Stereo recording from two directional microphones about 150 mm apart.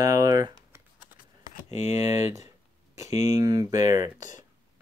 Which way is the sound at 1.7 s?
50° left (ahead or behind).